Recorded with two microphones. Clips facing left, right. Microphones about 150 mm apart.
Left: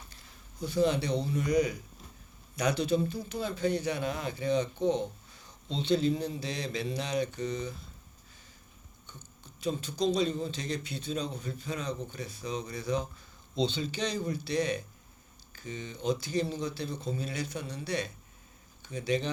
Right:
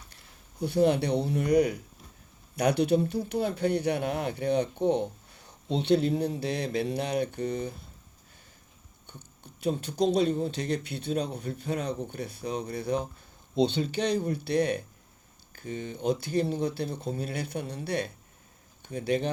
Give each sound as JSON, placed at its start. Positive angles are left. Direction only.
{"t": 0.6, "sound": "speech", "side_deg": -60}
{"t": 9.0, "sound": "speech", "side_deg": -60}